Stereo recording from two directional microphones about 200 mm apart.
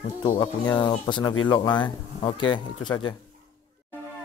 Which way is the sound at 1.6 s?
10° left (ahead or behind).